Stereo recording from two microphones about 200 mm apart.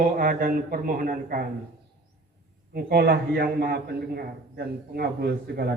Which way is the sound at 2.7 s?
50° right (ahead or behind).